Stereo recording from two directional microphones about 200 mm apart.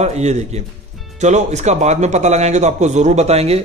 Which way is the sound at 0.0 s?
35° right (ahead or behind).